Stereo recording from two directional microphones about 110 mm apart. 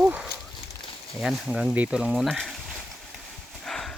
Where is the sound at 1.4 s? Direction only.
10° right (ahead or behind).